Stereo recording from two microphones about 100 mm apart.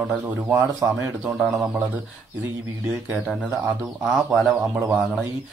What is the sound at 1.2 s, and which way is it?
Speech, centre (ahead or behind).